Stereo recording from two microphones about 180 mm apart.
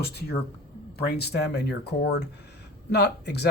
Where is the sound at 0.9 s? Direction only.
60° left (ahead or behind).